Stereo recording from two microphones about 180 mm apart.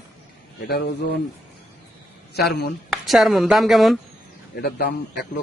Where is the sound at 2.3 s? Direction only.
70° left (ahead or behind).